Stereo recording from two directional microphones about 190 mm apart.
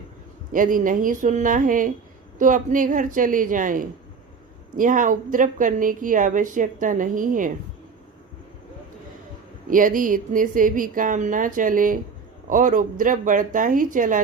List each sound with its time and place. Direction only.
0.5 s a woman's voice: 45° right (ahead or behind)
9.6 s a woman's voice: 45° right (ahead or behind)